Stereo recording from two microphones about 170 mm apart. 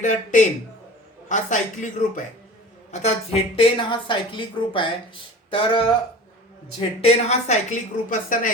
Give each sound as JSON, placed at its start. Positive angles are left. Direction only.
{"t": 0.0, "sound": "a woman's voice", "side_deg": 45}